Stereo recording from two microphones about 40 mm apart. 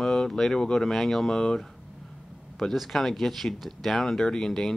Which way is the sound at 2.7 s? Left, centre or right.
Centre.